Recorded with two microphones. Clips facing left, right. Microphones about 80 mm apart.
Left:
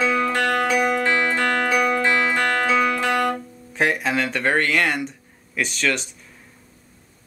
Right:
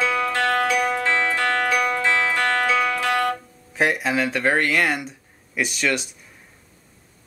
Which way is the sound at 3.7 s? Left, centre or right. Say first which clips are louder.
Even; centre.